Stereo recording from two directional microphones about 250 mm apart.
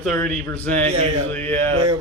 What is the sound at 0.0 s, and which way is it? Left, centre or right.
Speech, centre.